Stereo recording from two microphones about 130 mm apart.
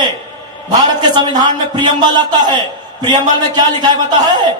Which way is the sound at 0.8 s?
30° right (ahead or behind).